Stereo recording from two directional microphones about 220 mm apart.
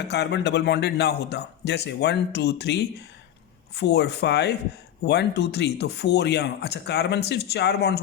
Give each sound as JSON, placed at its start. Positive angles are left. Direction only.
{"t": 0.1, "sound": "speech", "side_deg": 50}